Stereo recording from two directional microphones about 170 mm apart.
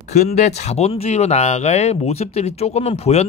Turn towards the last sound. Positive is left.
turn(degrees=40)  # may be behind; listen again after turning